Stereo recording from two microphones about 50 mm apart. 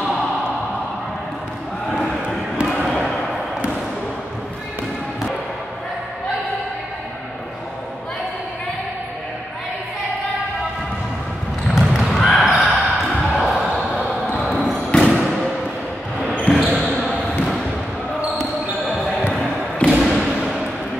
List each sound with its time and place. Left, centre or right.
11.7 s basketball bounce: centre
12.1 s basketball bounce: centre
15.0 s thump: centre
16.4 s basketball bounce: centre
19.9 s thump: centre
20.2 s a sound: centre